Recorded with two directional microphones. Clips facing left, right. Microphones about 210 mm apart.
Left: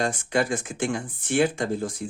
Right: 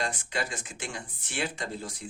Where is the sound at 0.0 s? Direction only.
50° left (ahead or behind).